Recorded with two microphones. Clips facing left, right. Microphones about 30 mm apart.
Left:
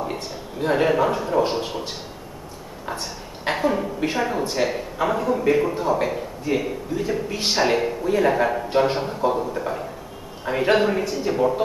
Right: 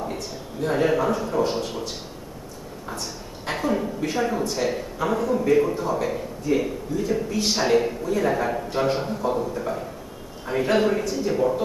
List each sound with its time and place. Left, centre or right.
0.1 s a man's voice: left
2.9 s a woman's voice: left